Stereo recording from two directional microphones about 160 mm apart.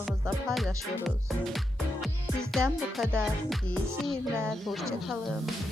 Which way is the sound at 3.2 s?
5° left (ahead or behind).